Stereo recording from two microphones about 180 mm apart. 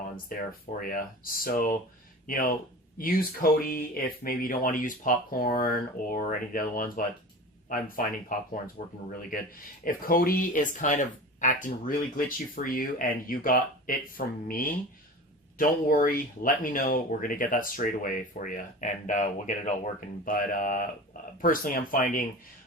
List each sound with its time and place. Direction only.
0.3 s speech: 50° left (ahead or behind)
9.8 s speech: 50° left (ahead or behind)